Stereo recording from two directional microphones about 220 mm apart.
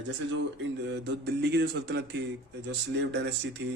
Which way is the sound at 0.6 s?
50° right (ahead or behind).